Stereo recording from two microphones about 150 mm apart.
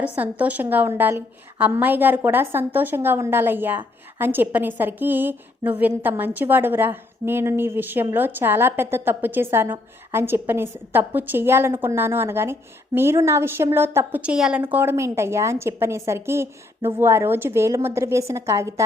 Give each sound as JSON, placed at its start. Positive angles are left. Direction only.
{"t": 0.0, "sound": "a woman's voice", "side_deg": -10}